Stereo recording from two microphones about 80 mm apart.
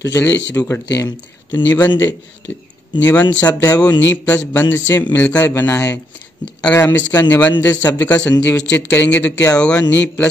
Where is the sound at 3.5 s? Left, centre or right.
Left.